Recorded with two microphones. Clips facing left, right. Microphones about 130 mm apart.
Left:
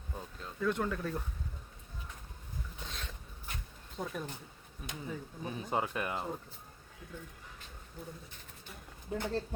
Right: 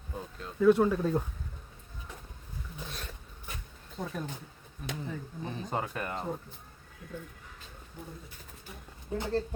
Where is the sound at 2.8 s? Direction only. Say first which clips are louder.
Right 4 dB; 10° right (ahead or behind).